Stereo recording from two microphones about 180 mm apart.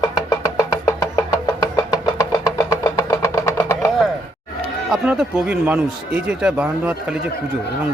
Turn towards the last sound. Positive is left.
turn(degrees=-5)  # may be behind; listen again after turning